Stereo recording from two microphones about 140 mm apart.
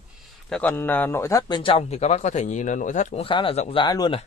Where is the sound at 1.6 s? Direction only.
45° left (ahead or behind); by 3.1 s 65° left (ahead or behind).